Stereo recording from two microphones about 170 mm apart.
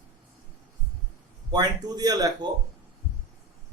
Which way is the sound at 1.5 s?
25° right (ahead or behind).